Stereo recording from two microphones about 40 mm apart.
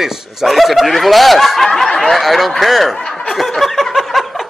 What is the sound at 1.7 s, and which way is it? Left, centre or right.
Snicker, centre.